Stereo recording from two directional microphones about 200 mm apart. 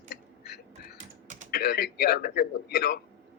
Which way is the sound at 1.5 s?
50° left (ahead or behind).